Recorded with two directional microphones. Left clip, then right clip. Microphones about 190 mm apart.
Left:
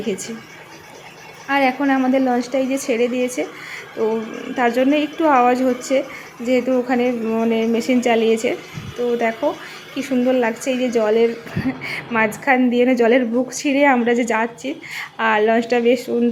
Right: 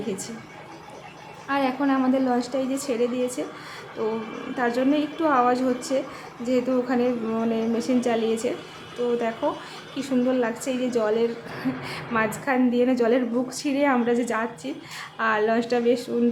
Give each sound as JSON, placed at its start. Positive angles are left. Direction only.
{"t": 0.1, "sound": "a woman's voice", "side_deg": 20}
{"t": 1.5, "sound": "a woman's voice", "side_deg": 20}
{"t": 4.5, "sound": "a woman's voice", "side_deg": 20}